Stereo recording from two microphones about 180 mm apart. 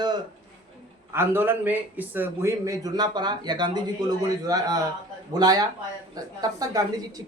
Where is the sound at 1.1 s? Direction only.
10° right (ahead or behind).